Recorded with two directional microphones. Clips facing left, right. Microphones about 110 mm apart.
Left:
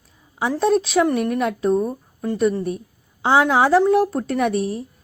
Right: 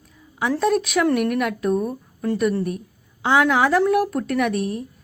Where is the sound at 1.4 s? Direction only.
30° left (ahead or behind).